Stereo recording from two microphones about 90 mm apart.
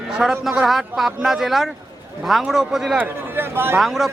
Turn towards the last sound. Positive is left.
turn(degrees=0)  # may be behind; listen again after turning